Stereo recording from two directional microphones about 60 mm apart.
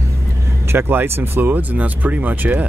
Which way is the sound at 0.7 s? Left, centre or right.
Right.